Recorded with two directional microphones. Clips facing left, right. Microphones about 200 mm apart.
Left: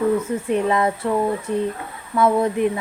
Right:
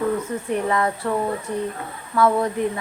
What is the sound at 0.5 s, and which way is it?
Speech, 20° left (ahead or behind).